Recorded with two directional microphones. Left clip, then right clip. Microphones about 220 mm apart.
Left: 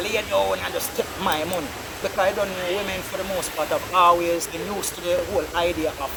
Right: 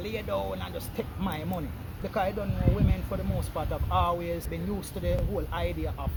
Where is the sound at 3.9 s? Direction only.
15° right (ahead or behind).